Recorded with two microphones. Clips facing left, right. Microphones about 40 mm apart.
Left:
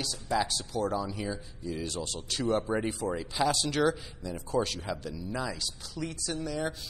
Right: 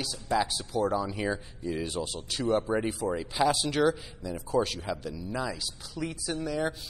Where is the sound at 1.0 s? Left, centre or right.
Right.